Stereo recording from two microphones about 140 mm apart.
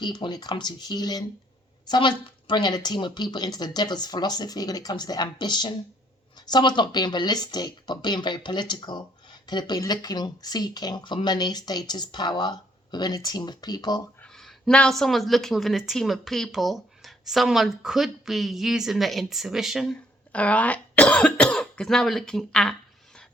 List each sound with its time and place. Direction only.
0.0 s speech: 30° left (ahead or behind)
14.2 s a woman's voice: 5° left (ahead or behind)
20.3 s speech: 10° left (ahead or behind)